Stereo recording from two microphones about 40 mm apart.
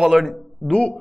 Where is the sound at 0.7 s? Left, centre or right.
Left.